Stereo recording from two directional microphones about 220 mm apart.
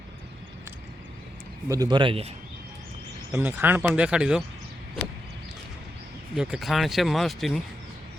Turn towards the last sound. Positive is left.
turn(degrees=0)  # may be behind; listen again after turning